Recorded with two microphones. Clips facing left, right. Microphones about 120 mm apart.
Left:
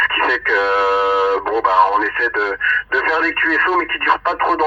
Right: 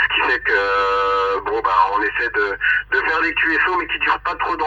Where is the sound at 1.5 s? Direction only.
30° left (ahead or behind).